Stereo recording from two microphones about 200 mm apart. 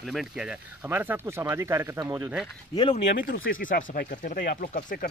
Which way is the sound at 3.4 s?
45° left (ahead or behind).